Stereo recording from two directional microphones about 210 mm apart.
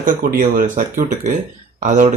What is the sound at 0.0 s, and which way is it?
Speech, 40° right (ahead or behind).